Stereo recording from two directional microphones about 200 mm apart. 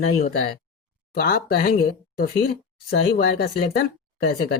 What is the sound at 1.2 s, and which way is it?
Speech, 50° left (ahead or behind).